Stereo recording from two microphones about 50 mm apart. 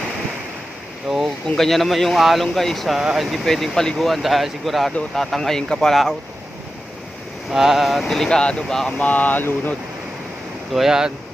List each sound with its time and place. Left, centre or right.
1.0 s a sound: centre
1.5 s speech: centre
3.4 s speech: centre
7.5 s speech: centre
8.0 s speech: centre
9.0 s speech: left
10.8 s speech: centre